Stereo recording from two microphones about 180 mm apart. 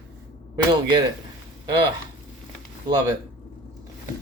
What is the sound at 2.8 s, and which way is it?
Speech, 20° right (ahead or behind).